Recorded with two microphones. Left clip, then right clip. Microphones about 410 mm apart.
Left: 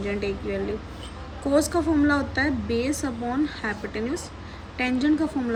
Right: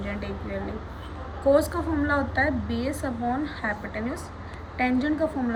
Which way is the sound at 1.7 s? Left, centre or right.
Centre.